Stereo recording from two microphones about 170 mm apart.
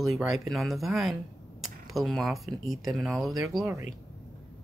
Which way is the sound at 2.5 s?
20° right (ahead or behind).